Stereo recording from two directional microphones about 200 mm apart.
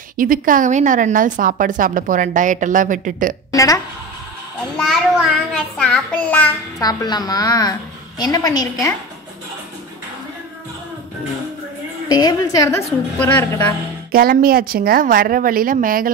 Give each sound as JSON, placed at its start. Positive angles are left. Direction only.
{"t": 0.2, "sound": "a woman's voice", "side_deg": -45}
{"t": 3.5, "sound": "a woman's voice", "side_deg": 15}
{"t": 4.7, "sound": "a child's voice", "side_deg": 0}
{"t": 6.3, "sound": "a child's voice", "side_deg": 15}
{"t": 12.1, "sound": "a woman's voice", "side_deg": 20}
{"t": 14.1, "sound": "a woman's voice", "side_deg": -45}